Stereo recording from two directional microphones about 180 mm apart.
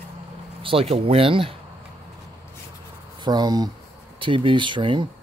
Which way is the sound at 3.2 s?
25° right (ahead or behind).